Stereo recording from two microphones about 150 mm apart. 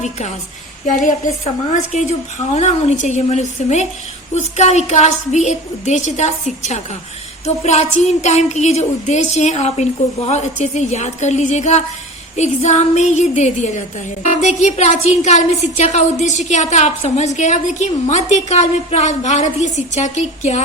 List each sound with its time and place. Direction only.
0.0 s a woman's voice: 50° left (ahead or behind)